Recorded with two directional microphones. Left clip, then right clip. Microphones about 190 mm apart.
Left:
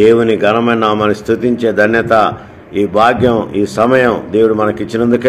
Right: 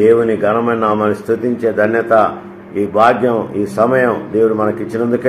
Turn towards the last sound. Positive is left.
turn(degrees=55)  # may be behind; listen again after turning